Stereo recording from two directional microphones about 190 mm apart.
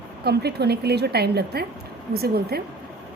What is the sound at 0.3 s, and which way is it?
A woman's voice, 60° right (ahead or behind).